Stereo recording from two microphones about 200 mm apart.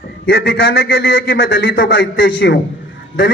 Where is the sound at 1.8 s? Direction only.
65° left (ahead or behind).